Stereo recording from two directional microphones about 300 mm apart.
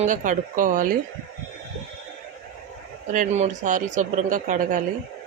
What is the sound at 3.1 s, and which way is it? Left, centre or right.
Speech, right.